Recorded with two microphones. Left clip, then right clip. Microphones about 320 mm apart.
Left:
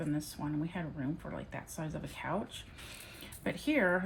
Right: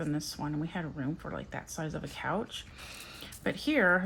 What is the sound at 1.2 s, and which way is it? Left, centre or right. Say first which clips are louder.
Speech: right 4 dB; centre.